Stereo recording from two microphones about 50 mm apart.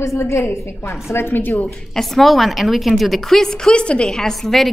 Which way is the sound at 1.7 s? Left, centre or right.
Centre.